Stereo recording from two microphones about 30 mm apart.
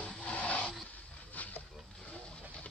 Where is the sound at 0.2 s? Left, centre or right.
Left.